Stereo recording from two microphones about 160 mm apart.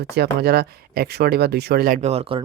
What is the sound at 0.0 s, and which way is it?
Speech, 90° right.